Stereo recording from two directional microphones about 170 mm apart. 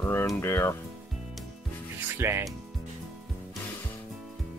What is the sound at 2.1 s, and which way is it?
Speech, 15° right (ahead or behind).